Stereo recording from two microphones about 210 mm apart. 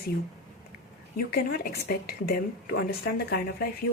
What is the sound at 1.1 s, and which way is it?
Speech, 45° left (ahead or behind).